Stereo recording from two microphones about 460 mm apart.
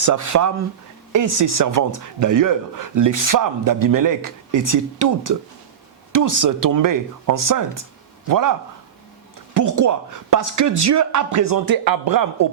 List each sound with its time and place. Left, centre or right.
0.0 s speech: right
9.6 s speech: right